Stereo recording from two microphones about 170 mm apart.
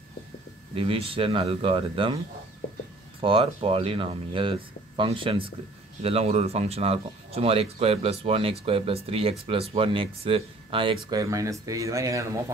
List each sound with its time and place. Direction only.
0.7 s speech: 35° right (ahead or behind)
3.2 s speech: 35° right (ahead or behind); by 12.3 s 20° right (ahead or behind)